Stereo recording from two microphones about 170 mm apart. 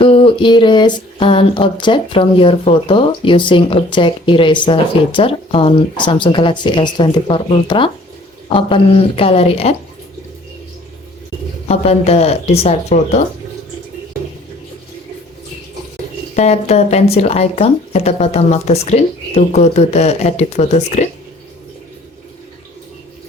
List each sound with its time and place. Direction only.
0.0 s a sound: 30° left (ahead or behind)
8.5 s speech: 30° left (ahead or behind)
11.7 s speech: 40° left (ahead or behind)
16.3 s speech: 40° left (ahead or behind)